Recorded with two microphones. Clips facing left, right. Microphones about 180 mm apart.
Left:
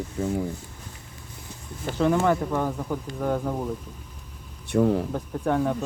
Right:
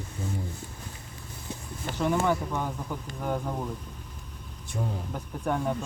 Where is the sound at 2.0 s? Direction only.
85° left.